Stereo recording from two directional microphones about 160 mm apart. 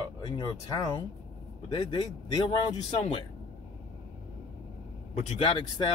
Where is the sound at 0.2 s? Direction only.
25° left (ahead or behind).